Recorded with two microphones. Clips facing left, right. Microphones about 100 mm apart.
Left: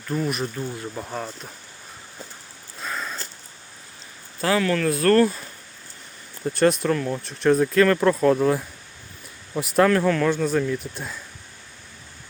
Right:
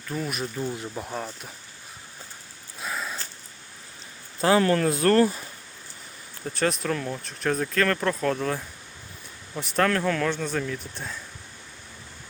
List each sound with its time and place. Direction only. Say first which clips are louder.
0.1 s speech: left 5 dB; centre (ahead or behind)
2.8 s sniff: left 1 dB; 5° right (ahead or behind)
4.4 s speech: right 1 dB; 25° right (ahead or behind)
6.4 s speech: left 7 dB; centre (ahead or behind)